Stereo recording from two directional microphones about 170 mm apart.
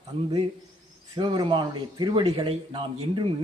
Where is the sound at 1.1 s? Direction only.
25° right (ahead or behind).